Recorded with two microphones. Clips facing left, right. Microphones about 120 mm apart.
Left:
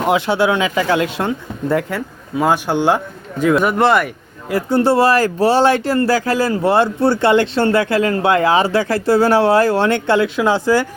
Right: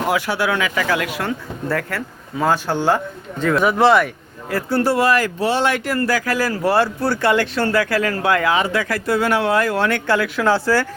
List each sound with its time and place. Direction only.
0.0 s speech: 25° left (ahead or behind)
1.7 s a man's voice: 15° left (ahead or behind)
4.4 s speech: 20° left (ahead or behind)